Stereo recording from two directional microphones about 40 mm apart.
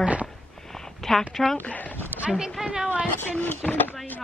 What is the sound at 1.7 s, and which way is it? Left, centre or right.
Speech, left.